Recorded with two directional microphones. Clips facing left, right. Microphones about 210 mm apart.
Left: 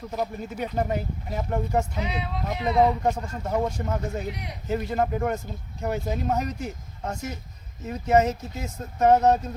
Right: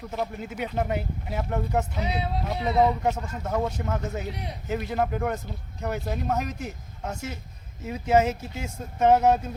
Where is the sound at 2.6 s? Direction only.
5° right (ahead or behind).